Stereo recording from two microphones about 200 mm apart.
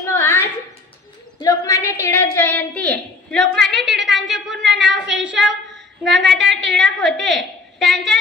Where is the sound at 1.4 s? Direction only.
15° left (ahead or behind).